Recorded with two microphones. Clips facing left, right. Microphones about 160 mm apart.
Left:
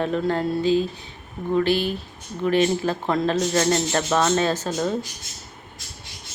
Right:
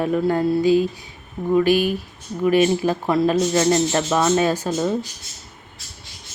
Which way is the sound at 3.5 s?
20° right (ahead or behind).